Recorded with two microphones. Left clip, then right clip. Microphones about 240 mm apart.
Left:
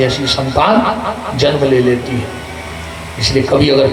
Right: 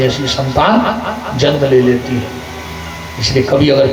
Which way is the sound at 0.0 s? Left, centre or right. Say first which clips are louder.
Left 1 dB; left.